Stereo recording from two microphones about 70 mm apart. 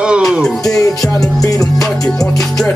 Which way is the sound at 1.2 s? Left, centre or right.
Left.